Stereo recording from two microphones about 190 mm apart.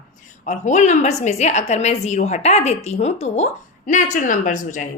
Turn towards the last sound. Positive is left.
turn(degrees=40)  # may be behind; listen again after turning